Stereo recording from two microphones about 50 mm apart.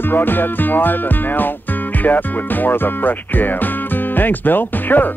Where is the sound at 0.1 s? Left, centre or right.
Left.